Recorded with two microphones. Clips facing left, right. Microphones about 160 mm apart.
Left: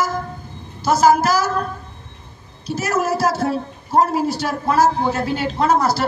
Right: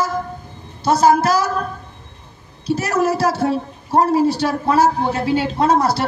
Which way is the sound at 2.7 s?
30° right (ahead or behind).